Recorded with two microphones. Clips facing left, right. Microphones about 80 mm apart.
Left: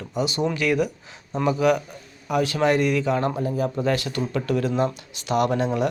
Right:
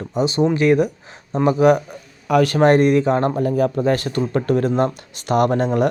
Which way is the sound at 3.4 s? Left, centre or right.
Right.